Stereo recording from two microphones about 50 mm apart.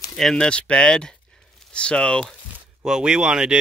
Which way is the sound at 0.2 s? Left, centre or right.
Centre.